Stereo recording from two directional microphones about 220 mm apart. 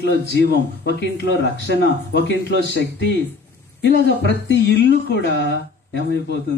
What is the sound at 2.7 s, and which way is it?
Speech, 50° left (ahead or behind).